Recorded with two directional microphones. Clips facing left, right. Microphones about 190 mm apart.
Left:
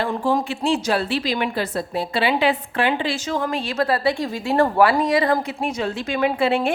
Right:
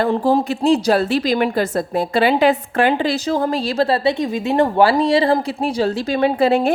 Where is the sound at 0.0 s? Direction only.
40° right (ahead or behind).